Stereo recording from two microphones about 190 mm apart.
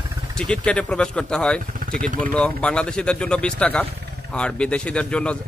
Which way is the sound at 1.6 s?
45° right (ahead or behind).